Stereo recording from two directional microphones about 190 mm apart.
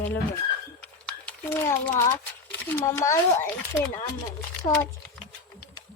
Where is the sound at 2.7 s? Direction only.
10° left (ahead or behind).